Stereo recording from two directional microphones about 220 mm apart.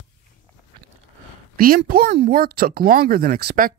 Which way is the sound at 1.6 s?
40° right (ahead or behind).